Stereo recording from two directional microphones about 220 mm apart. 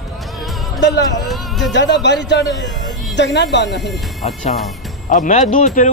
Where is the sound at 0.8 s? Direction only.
55° left (ahead or behind).